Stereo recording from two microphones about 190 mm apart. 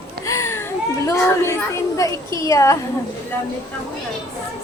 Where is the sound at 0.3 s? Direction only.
15° left (ahead or behind).